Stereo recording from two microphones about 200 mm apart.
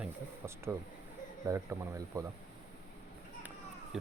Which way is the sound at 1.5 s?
15° right (ahead or behind).